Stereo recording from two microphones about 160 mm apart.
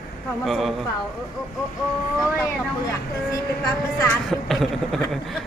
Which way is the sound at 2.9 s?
20° left (ahead or behind).